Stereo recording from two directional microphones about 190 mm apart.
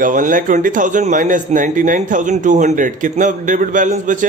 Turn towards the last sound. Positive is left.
turn(degrees=-40)  # may be behind; listen again after turning